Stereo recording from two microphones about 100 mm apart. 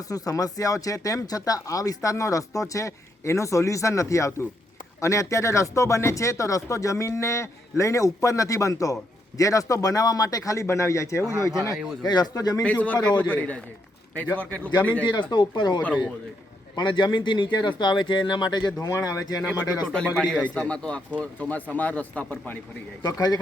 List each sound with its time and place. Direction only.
0.1 s speech: 35° left (ahead or behind)
12.6 s speech: 15° left (ahead or behind)
15.0 s speech: 50° left (ahead or behind)
19.9 s speech: 10° left (ahead or behind)
23.1 s speech: 40° left (ahead or behind)